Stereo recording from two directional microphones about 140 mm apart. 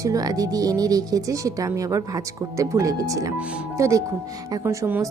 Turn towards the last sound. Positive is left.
turn(degrees=-20)  # may be behind; listen again after turning